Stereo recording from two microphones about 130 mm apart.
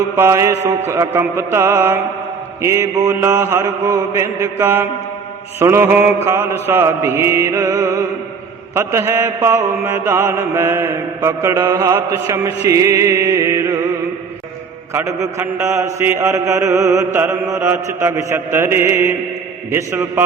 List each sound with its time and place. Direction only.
0.2 s mantra: 20° right (ahead or behind)
14.9 s mantra: 20° right (ahead or behind)